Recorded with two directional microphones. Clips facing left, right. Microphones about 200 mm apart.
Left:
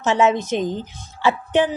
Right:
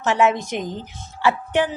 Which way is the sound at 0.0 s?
20° left (ahead or behind).